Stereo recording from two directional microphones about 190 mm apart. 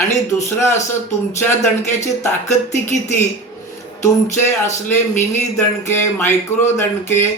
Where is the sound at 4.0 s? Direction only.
40° left (ahead or behind).